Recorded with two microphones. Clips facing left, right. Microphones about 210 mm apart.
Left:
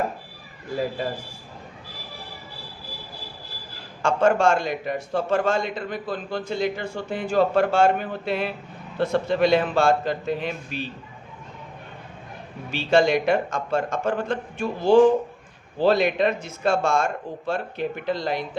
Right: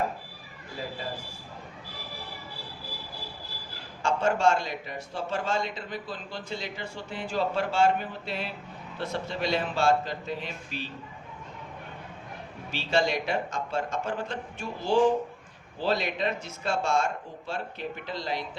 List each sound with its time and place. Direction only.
4.0 s a man's voice: 55° left (ahead or behind)
12.7 s a man's voice: 55° left (ahead or behind)